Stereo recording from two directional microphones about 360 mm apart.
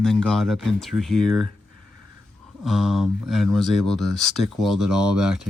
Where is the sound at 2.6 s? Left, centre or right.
Centre.